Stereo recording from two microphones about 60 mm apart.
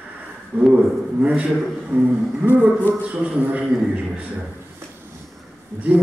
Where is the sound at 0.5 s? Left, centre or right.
Right.